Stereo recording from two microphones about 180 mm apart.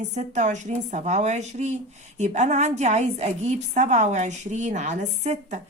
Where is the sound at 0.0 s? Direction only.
40° right (ahead or behind).